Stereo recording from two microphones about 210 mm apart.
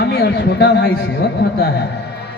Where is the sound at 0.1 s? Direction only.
50° left (ahead or behind).